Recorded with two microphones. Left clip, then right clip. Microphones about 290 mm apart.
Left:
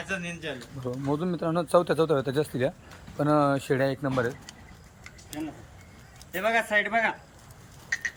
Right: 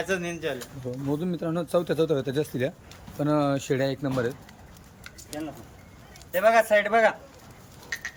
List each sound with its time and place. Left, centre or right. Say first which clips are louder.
0.0 s speech: right 5 dB; centre
1.1 s speech: left 2 dB; centre
6.3 s speech: right 5 dB; centre
7.9 s a sound: left 4 dB; centre